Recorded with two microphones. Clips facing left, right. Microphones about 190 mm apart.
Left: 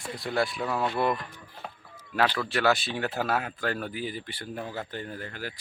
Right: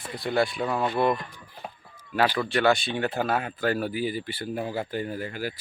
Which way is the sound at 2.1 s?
10° right (ahead or behind).